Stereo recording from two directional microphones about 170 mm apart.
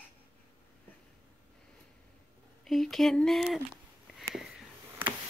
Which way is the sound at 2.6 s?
Centre (ahead or behind).